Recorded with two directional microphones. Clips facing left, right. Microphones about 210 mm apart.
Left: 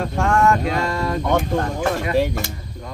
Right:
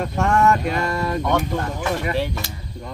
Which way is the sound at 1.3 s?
45° left (ahead or behind).